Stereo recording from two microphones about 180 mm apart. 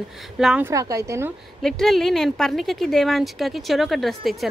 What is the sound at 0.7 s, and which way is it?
Speech, 20° right (ahead or behind).